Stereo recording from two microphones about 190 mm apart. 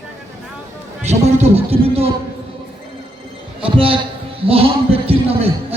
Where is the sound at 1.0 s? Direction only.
35° right (ahead or behind).